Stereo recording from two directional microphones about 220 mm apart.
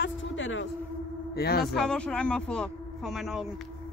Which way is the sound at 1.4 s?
45° left (ahead or behind).